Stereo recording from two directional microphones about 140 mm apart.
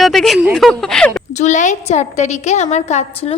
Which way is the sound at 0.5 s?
5° left (ahead or behind).